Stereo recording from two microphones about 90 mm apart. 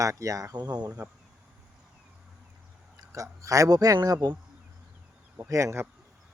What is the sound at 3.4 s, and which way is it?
Speech, 40° right (ahead or behind).